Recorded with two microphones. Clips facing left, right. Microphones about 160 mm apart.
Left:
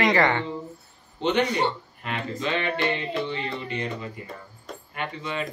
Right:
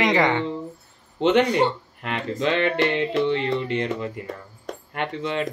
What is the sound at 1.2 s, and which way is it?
Speech, 90° right.